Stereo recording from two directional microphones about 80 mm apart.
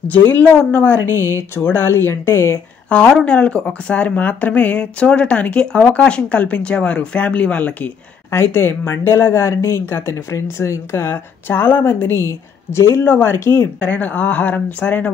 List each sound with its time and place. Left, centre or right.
0.1 s speech: left
0.9 s speech: left
2.9 s speech: centre
8.3 s speech: left
13.7 s speech: centre